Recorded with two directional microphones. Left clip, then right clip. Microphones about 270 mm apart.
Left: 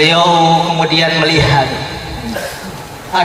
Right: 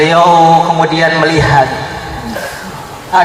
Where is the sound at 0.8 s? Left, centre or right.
Centre.